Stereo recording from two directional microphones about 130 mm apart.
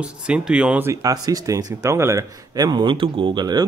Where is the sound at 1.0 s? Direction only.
30° right (ahead or behind).